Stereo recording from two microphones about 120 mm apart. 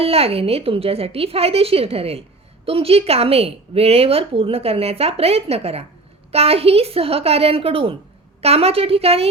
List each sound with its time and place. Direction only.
0.0 s a woman's voice: 55° right (ahead or behind)